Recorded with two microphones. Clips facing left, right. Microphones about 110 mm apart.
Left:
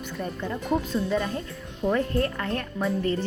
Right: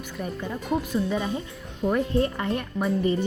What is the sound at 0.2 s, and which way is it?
A woman's voice, 5° right (ahead or behind).